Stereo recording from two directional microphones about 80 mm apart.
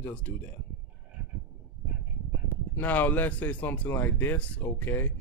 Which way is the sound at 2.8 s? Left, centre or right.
Left.